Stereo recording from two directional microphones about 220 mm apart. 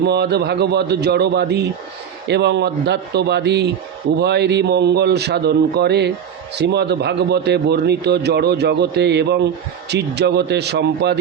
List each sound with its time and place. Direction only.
0.0 s speech: 50° right (ahead or behind)